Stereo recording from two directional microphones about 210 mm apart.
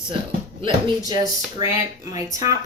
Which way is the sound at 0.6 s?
20° right (ahead or behind).